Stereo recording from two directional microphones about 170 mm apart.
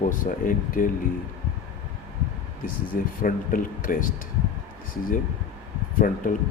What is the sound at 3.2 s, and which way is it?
Speech, 55° left (ahead or behind).